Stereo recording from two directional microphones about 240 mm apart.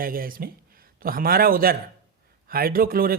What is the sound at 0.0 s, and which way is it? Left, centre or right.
A man's voice, right.